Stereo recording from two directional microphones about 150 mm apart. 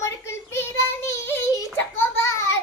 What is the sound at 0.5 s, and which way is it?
Child singing, 15° left (ahead or behind).